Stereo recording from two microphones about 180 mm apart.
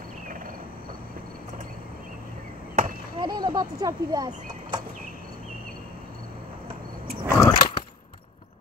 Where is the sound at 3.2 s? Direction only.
25° right (ahead or behind).